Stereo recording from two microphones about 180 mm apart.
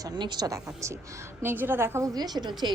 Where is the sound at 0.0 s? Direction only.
25° right (ahead or behind).